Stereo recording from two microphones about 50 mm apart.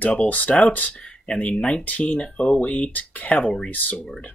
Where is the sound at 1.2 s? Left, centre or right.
Centre.